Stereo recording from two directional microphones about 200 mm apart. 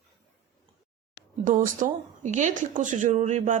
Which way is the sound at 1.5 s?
40° right (ahead or behind).